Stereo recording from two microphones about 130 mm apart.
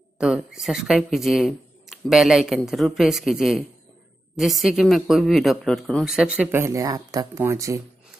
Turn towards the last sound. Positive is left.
turn(degrees=-25)  # may be behind; listen again after turning